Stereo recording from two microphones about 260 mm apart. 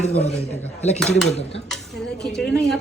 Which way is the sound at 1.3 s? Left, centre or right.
Left.